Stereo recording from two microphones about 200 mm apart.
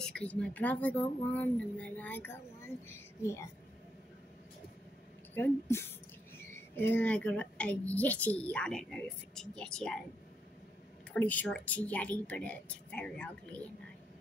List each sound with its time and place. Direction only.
0.0 s speech: 5° left (ahead or behind)
5.3 s a woman's voice: 10° left (ahead or behind)
11.1 s speech: 5° left (ahead or behind)